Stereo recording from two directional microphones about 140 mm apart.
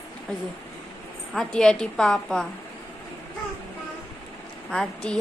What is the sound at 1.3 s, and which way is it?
Child singing, 5° left (ahead or behind).